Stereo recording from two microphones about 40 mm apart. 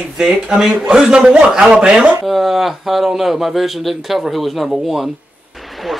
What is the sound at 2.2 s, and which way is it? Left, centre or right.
Speech, centre.